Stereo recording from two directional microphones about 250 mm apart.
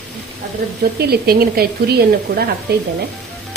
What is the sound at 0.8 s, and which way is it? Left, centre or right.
Speech, right.